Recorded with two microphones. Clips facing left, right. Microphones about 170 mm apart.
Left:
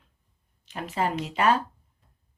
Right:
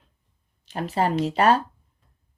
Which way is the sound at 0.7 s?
35° right (ahead or behind).